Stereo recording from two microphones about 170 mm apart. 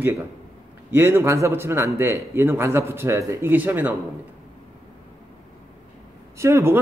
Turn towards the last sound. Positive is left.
turn(degrees=-15)  # may be behind; listen again after turning